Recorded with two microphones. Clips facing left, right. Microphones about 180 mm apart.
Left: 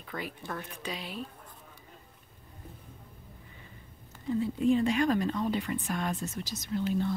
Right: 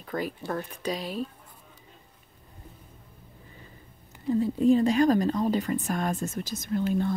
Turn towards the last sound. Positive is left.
turn(degrees=-50)  # may be behind; listen again after turning